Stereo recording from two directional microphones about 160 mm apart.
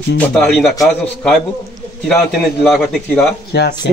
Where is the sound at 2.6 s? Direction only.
Centre (ahead or behind).